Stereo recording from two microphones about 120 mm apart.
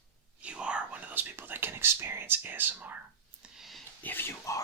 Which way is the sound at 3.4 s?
Centre (ahead or behind).